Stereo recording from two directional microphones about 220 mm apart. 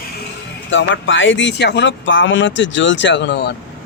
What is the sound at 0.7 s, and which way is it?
Speech, 60° left (ahead or behind).